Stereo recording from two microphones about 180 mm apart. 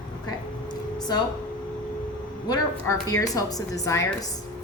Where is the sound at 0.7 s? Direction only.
20° left (ahead or behind).